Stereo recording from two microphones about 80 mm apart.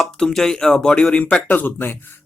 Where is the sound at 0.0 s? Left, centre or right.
Centre.